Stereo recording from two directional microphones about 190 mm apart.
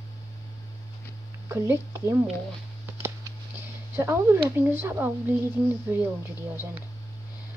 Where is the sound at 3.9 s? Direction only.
15° right (ahead or behind).